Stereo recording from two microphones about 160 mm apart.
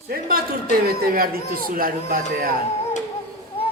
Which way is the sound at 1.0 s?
65° right (ahead or behind).